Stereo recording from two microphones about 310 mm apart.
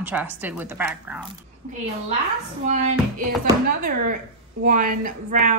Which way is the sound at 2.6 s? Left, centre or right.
Right.